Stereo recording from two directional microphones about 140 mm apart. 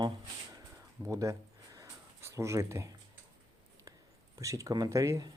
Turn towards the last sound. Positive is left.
turn(degrees=-20)  # may be behind; listen again after turning